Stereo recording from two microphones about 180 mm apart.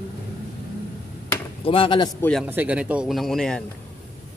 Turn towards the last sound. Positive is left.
turn(degrees=0)  # may be behind; listen again after turning